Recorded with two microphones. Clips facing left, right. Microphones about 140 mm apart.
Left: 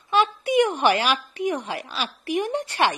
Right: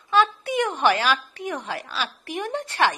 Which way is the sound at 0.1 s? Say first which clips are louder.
Left 1 dB; 15° left (ahead or behind).